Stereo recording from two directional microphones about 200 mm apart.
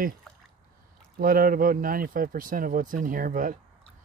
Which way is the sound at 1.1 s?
45° right (ahead or behind).